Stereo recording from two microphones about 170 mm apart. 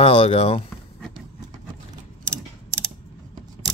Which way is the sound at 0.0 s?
35° left (ahead or behind).